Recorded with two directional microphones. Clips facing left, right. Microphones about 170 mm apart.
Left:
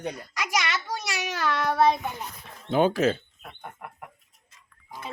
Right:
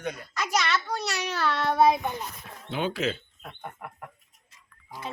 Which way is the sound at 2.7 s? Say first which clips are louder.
Left 7 dB; 45° left (ahead or behind).